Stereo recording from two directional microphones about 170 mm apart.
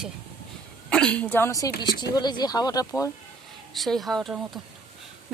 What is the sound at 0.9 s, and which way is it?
A woman's voice, 5° left (ahead or behind).